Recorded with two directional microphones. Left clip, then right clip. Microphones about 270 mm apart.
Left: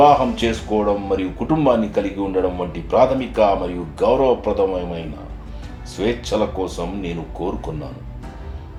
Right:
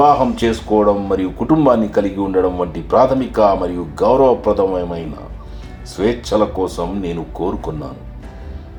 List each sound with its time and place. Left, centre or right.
0.0 s speech: right
6.0 s speech: right